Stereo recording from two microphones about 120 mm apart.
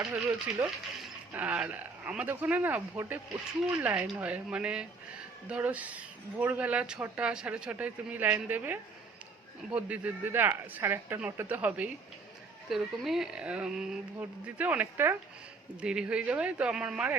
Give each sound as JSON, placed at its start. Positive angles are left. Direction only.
{"t": 0.0, "sound": "speech", "side_deg": -15}
{"t": 12.6, "sound": "speech", "side_deg": 0}